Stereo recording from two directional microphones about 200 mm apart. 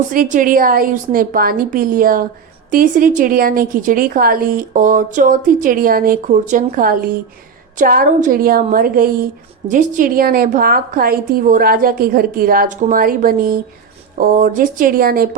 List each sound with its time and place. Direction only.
0.1 s a woman's voice: 40° right (ahead or behind)